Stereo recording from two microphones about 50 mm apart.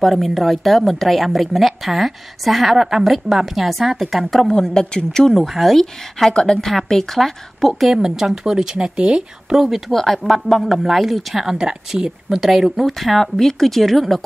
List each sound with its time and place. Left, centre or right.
0.0 s speech: centre
4.5 s speech: centre
6.3 s speech: centre
6.6 s speech: centre
7.9 s speech: centre
9.6 s speech: centre
12.3 s speech: centre